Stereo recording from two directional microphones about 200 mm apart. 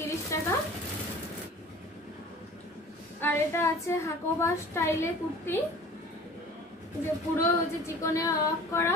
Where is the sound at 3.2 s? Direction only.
10° left (ahead or behind).